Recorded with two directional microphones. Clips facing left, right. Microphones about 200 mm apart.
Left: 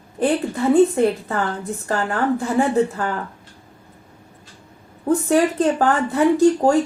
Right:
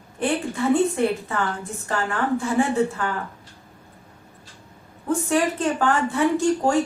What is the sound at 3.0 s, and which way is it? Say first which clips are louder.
Speech: left 3 dB; 40° left (ahead or behind).